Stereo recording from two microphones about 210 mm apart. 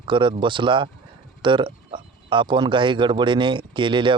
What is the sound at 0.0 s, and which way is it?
Speech, 25° right (ahead or behind).